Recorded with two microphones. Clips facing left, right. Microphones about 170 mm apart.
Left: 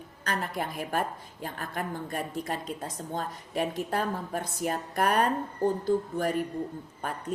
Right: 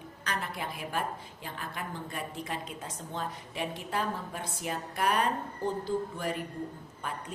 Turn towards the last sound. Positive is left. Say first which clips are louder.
# left 4 dB
turn(degrees=50)  # may be behind; listen again after turning